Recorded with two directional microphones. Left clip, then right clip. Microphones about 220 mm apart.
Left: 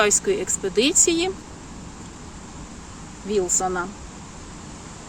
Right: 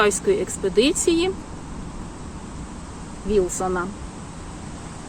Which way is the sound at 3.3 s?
25° left (ahead or behind).